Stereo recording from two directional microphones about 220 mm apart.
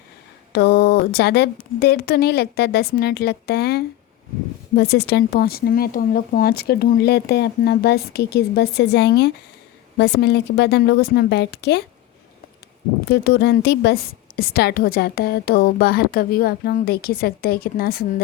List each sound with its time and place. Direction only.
0.5 s a woman's voice: 45° left (ahead or behind)
13.1 s a woman's voice: 50° left (ahead or behind)